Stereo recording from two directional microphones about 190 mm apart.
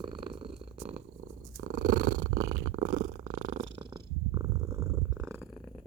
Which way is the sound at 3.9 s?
20° right (ahead or behind).